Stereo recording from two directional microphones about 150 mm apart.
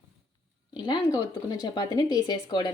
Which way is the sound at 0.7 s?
30° left (ahead or behind).